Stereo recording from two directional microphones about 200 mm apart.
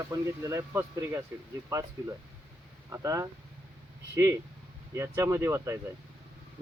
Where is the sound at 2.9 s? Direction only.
15° right (ahead or behind).